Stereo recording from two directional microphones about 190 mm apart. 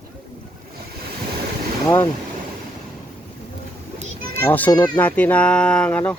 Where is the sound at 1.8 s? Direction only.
15° left (ahead or behind).